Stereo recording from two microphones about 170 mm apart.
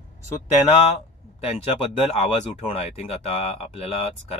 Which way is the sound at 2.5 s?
35° left (ahead or behind).